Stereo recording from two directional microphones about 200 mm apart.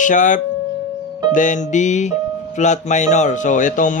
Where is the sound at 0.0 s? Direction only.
40° left (ahead or behind).